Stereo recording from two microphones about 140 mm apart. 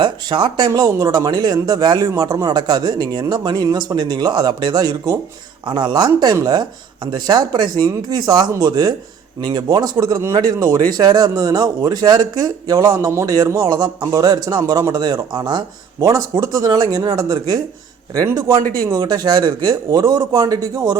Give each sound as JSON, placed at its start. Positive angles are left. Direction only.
{"t": 0.0, "sound": "speech", "side_deg": -35}